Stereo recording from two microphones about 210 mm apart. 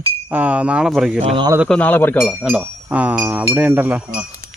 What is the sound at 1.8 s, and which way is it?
Speech, 10° left (ahead or behind).